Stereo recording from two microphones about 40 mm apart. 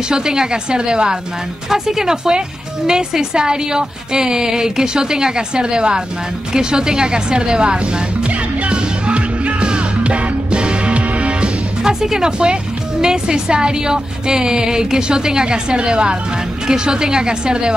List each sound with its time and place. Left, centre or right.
0.1 s speech: centre
1.7 s speech: centre
6.5 s music: centre
11.8 s speech: centre